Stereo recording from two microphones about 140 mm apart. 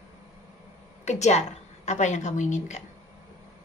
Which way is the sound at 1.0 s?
55° left (ahead or behind).